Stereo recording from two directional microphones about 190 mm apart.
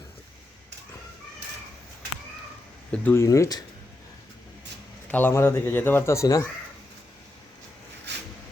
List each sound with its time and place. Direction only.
2.9 s speech: 10° left (ahead or behind)
5.0 s speech: 10° left (ahead or behind)
8.1 s a sound: 60° right (ahead or behind)